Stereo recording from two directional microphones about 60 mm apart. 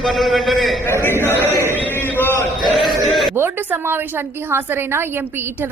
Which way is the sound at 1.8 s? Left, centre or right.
Left.